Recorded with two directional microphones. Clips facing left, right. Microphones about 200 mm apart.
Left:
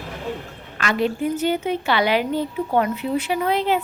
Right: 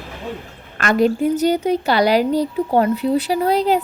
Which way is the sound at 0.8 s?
45° right (ahead or behind).